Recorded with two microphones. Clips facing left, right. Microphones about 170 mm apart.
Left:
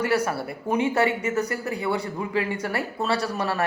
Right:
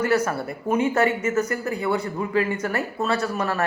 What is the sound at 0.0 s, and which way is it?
Speech, 10° left (ahead or behind).